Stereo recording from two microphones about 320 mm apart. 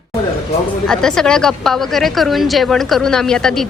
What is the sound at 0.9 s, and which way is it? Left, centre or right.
A woman's voice, centre.